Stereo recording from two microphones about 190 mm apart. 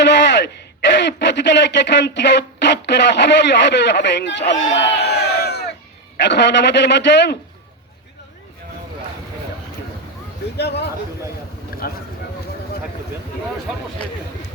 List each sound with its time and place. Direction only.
0.0 s a sound: 65° left (ahead or behind)
0.9 s a man's voice: 65° left (ahead or behind)
10.6 s speech: 60° left (ahead or behind)